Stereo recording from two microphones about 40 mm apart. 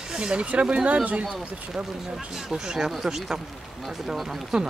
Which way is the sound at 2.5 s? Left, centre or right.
Centre.